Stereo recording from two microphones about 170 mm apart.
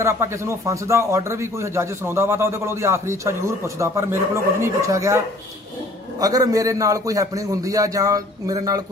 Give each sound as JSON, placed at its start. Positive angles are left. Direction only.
{"t": 0.0, "sound": "a man's voice", "side_deg": -15}